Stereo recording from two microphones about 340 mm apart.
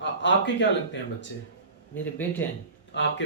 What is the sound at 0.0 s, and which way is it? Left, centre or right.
A man's voice, left.